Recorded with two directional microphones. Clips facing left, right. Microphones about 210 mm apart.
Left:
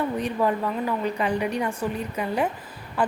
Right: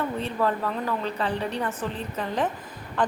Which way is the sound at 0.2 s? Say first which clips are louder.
Left 2 dB; 15° left (ahead or behind).